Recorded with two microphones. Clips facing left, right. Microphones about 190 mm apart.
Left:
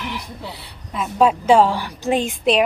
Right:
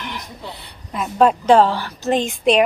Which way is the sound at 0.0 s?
5° left (ahead or behind).